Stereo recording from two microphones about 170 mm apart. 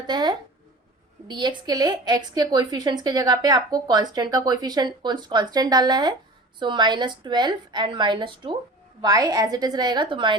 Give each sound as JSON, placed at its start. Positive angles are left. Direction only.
{"t": 0.1, "sound": "a woman's voice", "side_deg": -25}